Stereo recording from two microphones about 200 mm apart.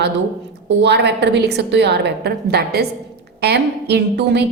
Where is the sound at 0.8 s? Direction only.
60° right (ahead or behind).